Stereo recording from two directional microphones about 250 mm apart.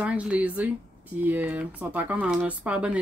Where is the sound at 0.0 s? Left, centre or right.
Centre.